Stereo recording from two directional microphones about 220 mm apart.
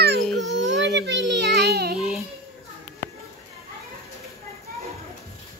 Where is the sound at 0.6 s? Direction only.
55° right (ahead or behind).